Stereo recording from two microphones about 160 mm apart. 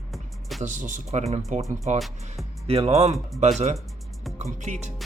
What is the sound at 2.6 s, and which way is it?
Speech, 35° right (ahead or behind).